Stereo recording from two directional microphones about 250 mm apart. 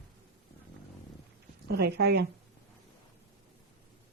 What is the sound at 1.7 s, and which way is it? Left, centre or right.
Speech, right.